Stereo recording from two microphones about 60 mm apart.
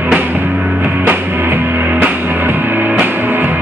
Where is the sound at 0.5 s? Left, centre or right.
Right.